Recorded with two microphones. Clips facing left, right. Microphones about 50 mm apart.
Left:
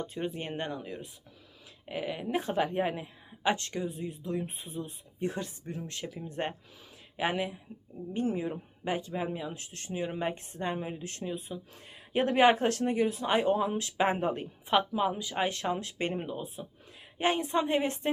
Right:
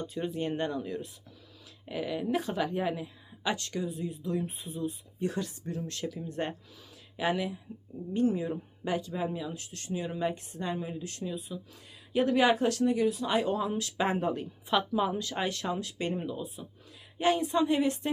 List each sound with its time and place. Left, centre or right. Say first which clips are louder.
0.0 s speech: right 2 dB; left
14.9 s speech: even; centre
15.4 s speech: left 1 dB; left